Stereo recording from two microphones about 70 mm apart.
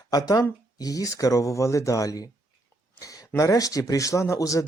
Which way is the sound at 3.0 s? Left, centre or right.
Left.